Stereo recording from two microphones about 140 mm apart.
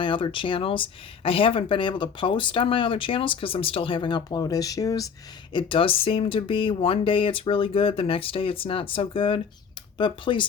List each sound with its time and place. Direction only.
0.0 s speech: 35° left (ahead or behind)
5.5 s speech: 40° left (ahead or behind)